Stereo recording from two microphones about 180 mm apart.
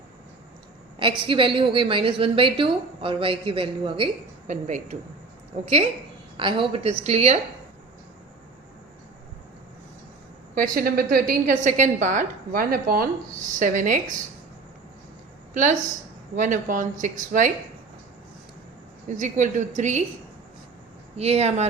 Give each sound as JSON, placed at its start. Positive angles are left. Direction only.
{"t": 1.2, "sound": "a woman's voice", "side_deg": -30}
{"t": 4.4, "sound": "a woman's voice", "side_deg": -40}
{"t": 6.3, "sound": "a woman's voice", "side_deg": -25}
{"t": 10.5, "sound": "a woman's voice", "side_deg": -50}
{"t": 15.5, "sound": "a woman's voice", "side_deg": -45}
{"t": 19.0, "sound": "a woman's voice", "side_deg": -45}
{"t": 21.2, "sound": "a woman's voice", "side_deg": -35}